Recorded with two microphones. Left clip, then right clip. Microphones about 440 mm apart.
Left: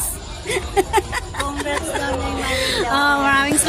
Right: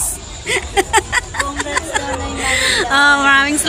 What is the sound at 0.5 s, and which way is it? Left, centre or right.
Music, left.